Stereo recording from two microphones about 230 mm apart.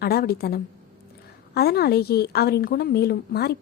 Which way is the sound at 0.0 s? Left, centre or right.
Left.